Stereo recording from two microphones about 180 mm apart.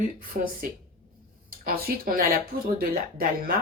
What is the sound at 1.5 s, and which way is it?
Speech, 55° right (ahead or behind).